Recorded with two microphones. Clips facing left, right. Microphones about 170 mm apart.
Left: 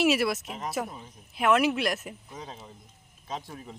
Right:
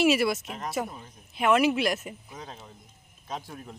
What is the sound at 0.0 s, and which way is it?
Speech, centre (ahead or behind).